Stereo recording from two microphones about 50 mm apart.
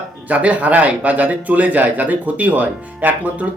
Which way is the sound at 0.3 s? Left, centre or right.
Right.